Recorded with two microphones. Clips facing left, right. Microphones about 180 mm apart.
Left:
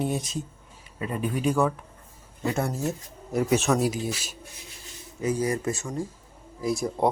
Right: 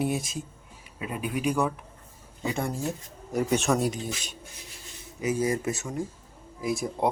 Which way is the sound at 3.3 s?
Centre (ahead or behind).